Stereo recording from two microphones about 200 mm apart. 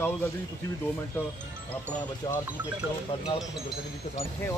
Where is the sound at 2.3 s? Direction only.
20° left (ahead or behind).